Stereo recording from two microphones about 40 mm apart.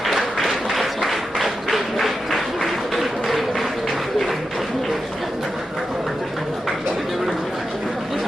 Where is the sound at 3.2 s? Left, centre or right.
Centre.